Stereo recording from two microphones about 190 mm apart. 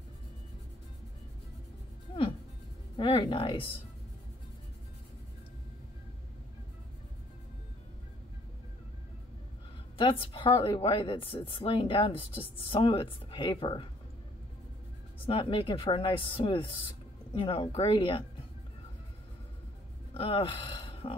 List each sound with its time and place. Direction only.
3.0 s speech: 30° left (ahead or behind)
9.9 s speech: 25° left (ahead or behind)
15.2 s speech: 30° left (ahead or behind)
20.2 s speech: 30° left (ahead or behind)